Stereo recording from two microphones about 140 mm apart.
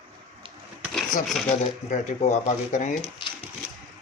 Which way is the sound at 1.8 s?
60° left (ahead or behind).